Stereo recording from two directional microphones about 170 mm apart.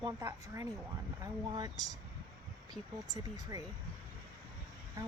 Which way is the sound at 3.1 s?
20° right (ahead or behind).